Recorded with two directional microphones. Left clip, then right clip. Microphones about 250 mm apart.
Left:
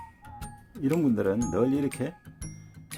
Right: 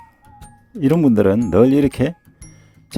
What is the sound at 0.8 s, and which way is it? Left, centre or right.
Speech, right.